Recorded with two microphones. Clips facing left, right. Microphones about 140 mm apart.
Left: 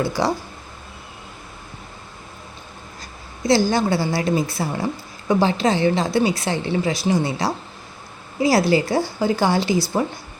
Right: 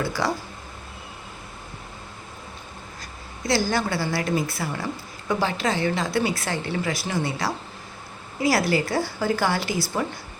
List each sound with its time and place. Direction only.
0.2 s a woman's voice: 25° left (ahead or behind)
3.4 s a woman's voice: 25° left (ahead or behind)